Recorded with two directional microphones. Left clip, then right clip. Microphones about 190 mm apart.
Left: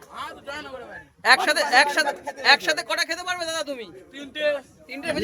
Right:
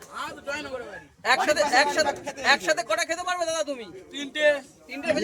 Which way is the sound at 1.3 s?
40° left (ahead or behind).